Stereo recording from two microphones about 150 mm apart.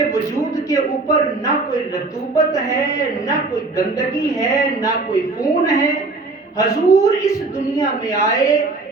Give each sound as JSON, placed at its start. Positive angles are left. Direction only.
{"t": 0.1, "sound": "a woman's voice", "side_deg": 20}